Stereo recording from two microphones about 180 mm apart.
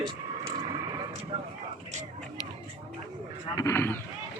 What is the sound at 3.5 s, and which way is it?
Speech, 15° left (ahead or behind).